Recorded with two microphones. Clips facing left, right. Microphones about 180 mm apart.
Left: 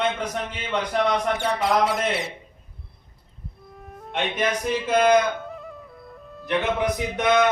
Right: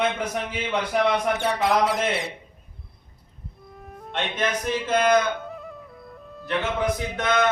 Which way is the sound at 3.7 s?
Centre (ahead or behind).